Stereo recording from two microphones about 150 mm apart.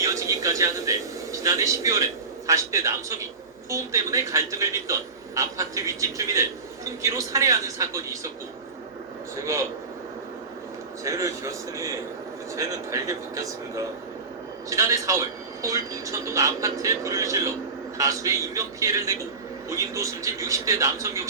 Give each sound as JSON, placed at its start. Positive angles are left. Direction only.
{"t": 0.0, "sound": "a man's voice", "side_deg": -20}
{"t": 9.3, "sound": "a man's voice", "side_deg": -20}
{"t": 11.0, "sound": "a man's voice", "side_deg": -20}